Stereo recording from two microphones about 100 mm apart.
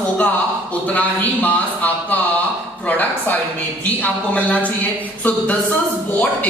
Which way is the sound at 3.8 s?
15° left (ahead or behind).